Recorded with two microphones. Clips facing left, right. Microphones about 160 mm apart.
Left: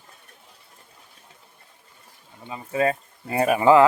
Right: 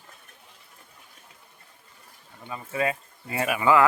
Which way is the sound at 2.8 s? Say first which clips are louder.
Left 5 dB; 35° left (ahead or behind).